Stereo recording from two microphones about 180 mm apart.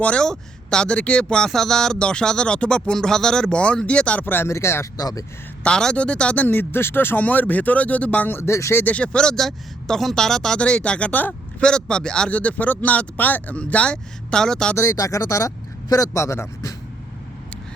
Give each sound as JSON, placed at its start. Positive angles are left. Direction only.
{"t": 0.0, "sound": "speech", "side_deg": 5}
{"t": 5.6, "sound": "speech", "side_deg": 5}
{"t": 14.8, "sound": "speech", "side_deg": 15}